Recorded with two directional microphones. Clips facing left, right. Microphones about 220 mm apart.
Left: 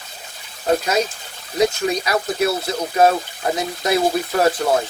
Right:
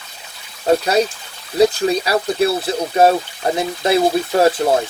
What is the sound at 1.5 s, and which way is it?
Speech, 30° right (ahead or behind).